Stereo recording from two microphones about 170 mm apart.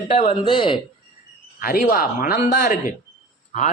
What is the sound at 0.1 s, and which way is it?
Speech, 40° left (ahead or behind).